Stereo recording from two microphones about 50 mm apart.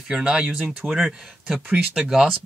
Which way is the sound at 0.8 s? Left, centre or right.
Right.